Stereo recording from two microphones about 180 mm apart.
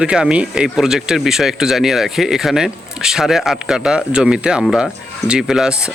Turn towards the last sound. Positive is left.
turn(degrees=-5)  # may be behind; listen again after turning